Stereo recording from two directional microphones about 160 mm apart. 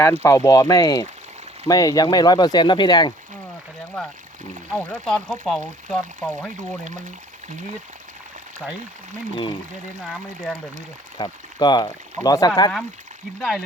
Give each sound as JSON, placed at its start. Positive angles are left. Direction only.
{"t": 0.2, "sound": "speech", "side_deg": 20}
{"t": 4.7, "sound": "speech", "side_deg": 5}
{"t": 9.3, "sound": "speech", "side_deg": 30}
{"t": 10.0, "sound": "speech", "side_deg": 5}
{"t": 11.2, "sound": "speech", "side_deg": 25}